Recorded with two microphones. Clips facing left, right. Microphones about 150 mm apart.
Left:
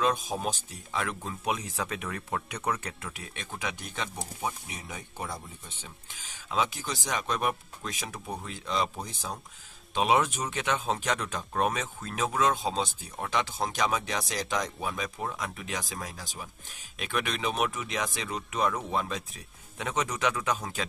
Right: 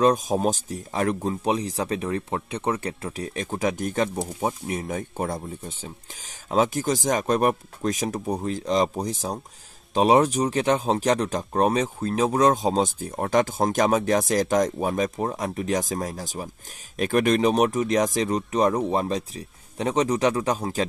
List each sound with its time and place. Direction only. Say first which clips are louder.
0.0 s speech: right 8 dB; 40° right (ahead or behind)